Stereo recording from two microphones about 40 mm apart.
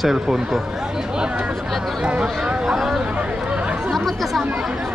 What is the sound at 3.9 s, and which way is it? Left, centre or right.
Chatter, centre.